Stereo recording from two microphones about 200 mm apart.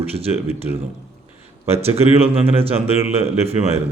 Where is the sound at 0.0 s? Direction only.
30° right (ahead or behind).